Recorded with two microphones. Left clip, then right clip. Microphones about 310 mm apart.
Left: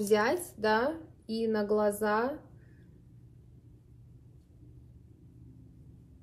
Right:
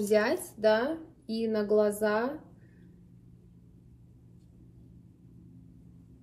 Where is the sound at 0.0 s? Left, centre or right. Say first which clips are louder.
Right 1 dB; centre.